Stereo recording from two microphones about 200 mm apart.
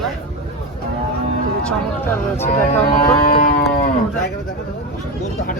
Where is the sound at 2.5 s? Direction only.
45° left (ahead or behind).